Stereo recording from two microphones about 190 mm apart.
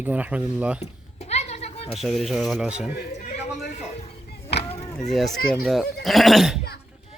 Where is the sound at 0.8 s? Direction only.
35° left (ahead or behind).